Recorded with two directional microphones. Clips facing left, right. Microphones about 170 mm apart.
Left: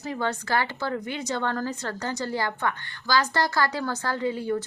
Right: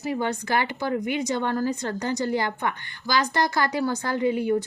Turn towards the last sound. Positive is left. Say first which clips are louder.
# right 4 dB
turn(degrees=-15)  # may be behind; listen again after turning